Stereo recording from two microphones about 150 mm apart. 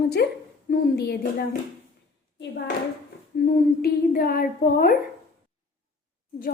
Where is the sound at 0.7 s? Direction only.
90° left.